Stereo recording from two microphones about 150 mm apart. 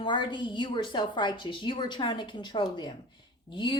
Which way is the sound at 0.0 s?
30° left (ahead or behind).